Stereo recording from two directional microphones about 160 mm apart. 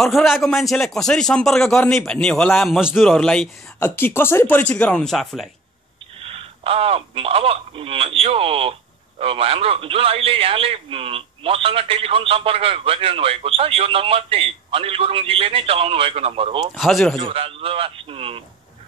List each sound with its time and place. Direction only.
0.0 s a man's voice: centre (ahead or behind)
3.8 s speech: 15° left (ahead or behind)
6.2 s speech: 35° right (ahead or behind)
16.7 s a man's voice: centre (ahead or behind)
17.2 s speech: 35° right (ahead or behind)